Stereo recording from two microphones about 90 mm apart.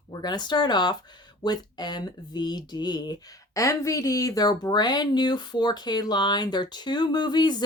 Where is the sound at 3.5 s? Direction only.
35° left (ahead or behind).